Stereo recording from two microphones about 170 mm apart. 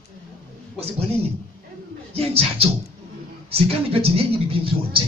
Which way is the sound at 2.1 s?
35° right (ahead or behind).